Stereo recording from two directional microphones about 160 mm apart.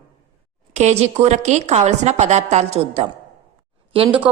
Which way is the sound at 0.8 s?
45° right (ahead or behind).